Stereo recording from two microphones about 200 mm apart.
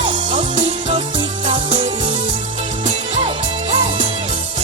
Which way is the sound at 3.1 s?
30° right (ahead or behind).